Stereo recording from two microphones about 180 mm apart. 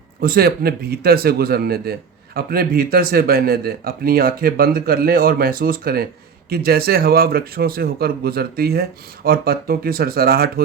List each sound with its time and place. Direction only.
0.2 s a man's voice: 55° right (ahead or behind)